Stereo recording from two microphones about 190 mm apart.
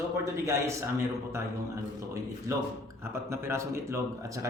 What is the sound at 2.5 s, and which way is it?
Speech, 15° right (ahead or behind).